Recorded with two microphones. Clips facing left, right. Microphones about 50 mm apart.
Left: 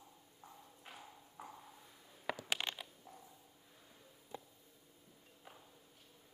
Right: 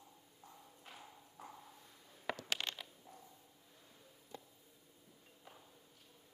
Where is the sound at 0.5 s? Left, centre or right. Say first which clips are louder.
Left 1 dB; centre.